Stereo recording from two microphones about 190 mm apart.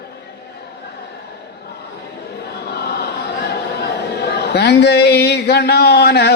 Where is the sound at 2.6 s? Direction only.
60° left (ahead or behind).